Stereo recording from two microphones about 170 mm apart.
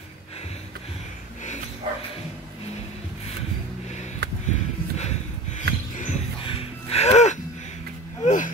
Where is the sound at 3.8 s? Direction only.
40° left (ahead or behind).